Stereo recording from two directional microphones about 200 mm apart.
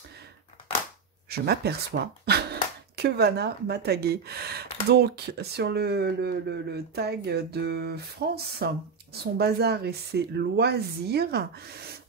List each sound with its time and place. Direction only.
1.3 s speech: 55° right (ahead or behind)